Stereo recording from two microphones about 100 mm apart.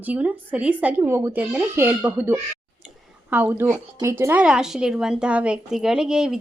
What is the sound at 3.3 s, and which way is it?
Speech, 20° right (ahead or behind).